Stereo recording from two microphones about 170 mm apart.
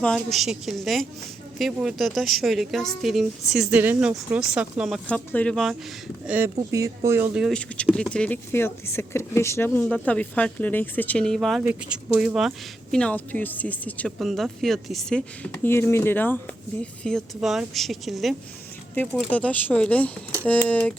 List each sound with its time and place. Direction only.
0.0 s speech: 5° left (ahead or behind)
5.0 s speech: 10° left (ahead or behind)
6.2 s speech: 10° right (ahead or behind)
7.3 s speech: centre (ahead or behind)
15.5 s speech: 15° left (ahead or behind)